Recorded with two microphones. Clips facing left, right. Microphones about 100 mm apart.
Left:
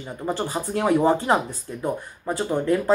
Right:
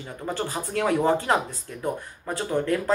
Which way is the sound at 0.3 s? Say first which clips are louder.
Left 3 dB; 15° left (ahead or behind).